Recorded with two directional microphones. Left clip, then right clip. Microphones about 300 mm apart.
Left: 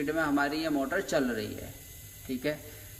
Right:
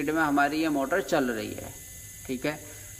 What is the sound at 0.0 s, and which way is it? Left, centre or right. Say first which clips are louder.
A man's voice: right 4 dB; centre.